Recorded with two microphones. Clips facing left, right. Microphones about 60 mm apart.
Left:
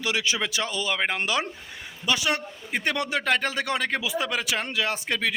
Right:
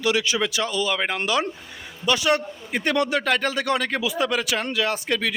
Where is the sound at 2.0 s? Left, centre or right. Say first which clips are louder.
Right 5 dB; centre.